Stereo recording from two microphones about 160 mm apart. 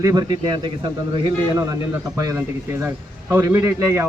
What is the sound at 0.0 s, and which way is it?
A man's voice, 25° right (ahead or behind).